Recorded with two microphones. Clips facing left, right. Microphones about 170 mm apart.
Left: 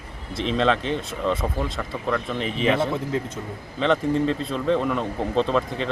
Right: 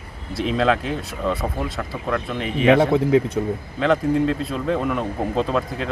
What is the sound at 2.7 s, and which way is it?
Speech, 65° right (ahead or behind).